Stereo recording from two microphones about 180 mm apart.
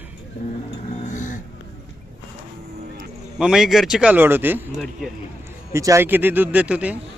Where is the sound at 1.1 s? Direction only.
45° left (ahead or behind).